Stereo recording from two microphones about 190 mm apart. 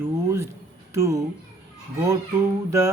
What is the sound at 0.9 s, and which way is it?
Speech, 15° right (ahead or behind).